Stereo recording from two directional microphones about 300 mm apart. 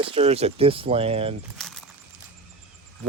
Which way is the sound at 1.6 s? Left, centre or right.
Centre.